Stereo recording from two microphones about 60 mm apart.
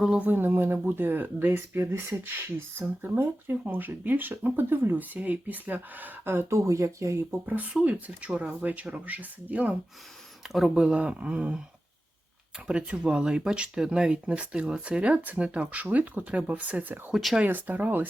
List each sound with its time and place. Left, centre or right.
0.2 s speech: right
7.3 s speech: right
7.7 s speech: centre
10.4 s speech: centre
10.8 s speech: centre
12.6 s speech: centre